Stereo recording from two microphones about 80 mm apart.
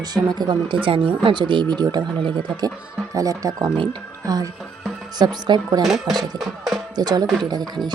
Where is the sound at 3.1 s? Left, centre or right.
Right.